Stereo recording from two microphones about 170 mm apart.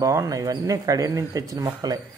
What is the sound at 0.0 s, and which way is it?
Speech, 20° right (ahead or behind).